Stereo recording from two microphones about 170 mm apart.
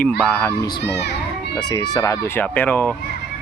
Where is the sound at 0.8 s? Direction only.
80° left.